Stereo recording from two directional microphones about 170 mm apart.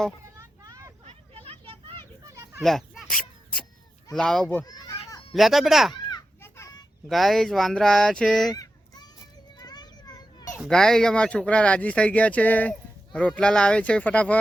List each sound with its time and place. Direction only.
0.6 s vehicle: 20° right (ahead or behind)
1.0 s a sound: 35° right (ahead or behind)
2.6 s a sound: centre (ahead or behind)
4.1 s speech: 5° left (ahead or behind)
4.4 s a child's voice: 20° left (ahead or behind)
5.3 s speech: centre (ahead or behind)
5.9 s children playing: 25° left (ahead or behind)
7.1 s speech: centre (ahead or behind)
9.6 s children playing: 25° left (ahead or behind)
10.5 s speech: 5° left (ahead or behind)